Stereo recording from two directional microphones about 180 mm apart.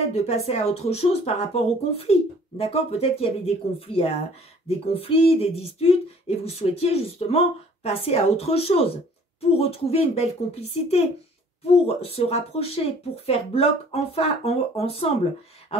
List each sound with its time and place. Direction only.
0.1 s speech: 35° left (ahead or behind)